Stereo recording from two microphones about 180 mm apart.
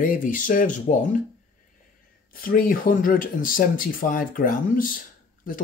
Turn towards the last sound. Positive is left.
turn(degrees=50)  # may be behind; listen again after turning